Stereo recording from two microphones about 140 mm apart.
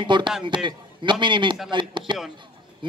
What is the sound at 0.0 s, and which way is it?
A man's voice, 35° right (ahead or behind).